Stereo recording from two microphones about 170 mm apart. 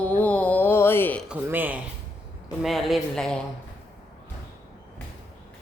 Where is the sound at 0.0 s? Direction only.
10° left (ahead or behind).